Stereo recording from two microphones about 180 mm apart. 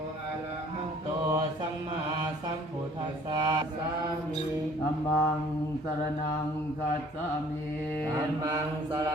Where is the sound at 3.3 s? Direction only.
20° right (ahead or behind).